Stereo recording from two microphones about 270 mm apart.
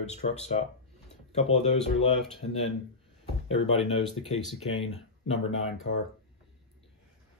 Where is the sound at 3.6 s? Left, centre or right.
Left.